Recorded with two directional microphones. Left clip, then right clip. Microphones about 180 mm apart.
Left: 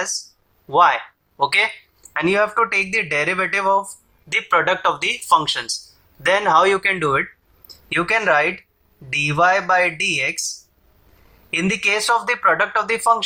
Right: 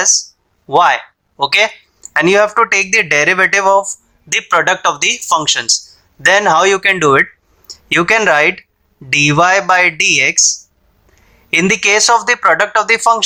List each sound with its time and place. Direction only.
0.7 s speech: 40° right (ahead or behind)
2.1 s speech: 45° right (ahead or behind)
4.3 s speech: 35° right (ahead or behind)
11.5 s speech: 45° right (ahead or behind)